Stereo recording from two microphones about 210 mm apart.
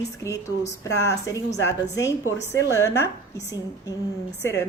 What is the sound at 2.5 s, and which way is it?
A woman's voice, 15° left (ahead or behind).